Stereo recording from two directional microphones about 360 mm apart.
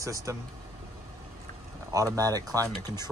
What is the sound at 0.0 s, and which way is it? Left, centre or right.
Speech, centre.